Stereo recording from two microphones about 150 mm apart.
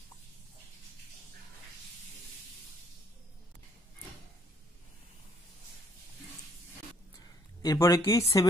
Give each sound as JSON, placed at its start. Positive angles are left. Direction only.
{"t": 7.6, "sound": "speech", "side_deg": 20}